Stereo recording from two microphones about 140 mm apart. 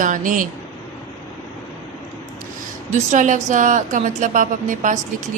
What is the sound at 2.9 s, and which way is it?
A woman's voice, 60° right (ahead or behind).